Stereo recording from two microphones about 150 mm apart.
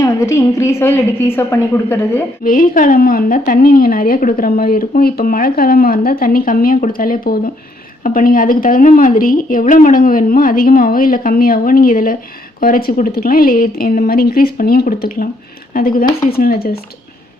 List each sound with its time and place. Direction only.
0.0 s a woman's voice: 20° left (ahead or behind)
2.4 s a woman's voice: 65° left (ahead or behind)